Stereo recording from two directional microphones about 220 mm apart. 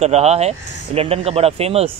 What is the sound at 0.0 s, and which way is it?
Speech, 30° right (ahead or behind).